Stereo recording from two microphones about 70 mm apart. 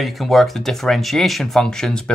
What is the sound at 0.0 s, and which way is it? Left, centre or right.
Speech, centre.